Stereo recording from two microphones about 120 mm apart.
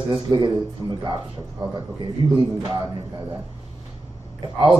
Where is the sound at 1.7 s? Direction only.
40° right (ahead or behind).